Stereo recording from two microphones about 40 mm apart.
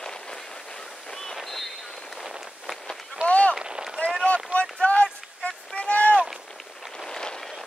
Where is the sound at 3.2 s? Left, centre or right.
Left.